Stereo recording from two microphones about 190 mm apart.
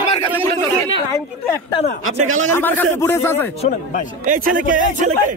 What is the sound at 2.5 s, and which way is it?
A man's voice, 10° left (ahead or behind).